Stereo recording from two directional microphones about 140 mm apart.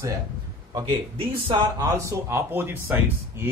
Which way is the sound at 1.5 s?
25° right (ahead or behind).